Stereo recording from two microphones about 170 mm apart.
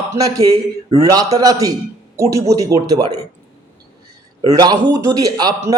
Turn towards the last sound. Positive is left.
turn(degrees=-20)  # may be behind; listen again after turning